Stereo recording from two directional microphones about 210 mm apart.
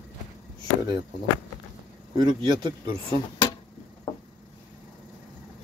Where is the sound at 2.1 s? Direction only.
20° right (ahead or behind).